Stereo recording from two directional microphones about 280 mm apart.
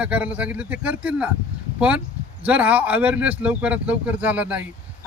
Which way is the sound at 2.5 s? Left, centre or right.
Centre.